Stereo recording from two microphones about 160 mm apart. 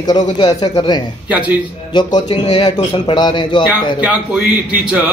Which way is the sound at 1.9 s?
30° left (ahead or behind).